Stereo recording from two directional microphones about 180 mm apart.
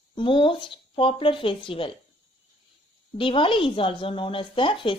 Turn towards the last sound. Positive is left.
turn(degrees=30)  # may be behind; listen again after turning